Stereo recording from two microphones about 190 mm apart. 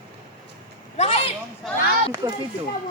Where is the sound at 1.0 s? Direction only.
35° left (ahead or behind).